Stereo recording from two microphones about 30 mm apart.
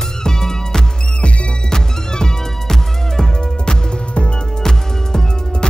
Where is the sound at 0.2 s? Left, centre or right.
Centre.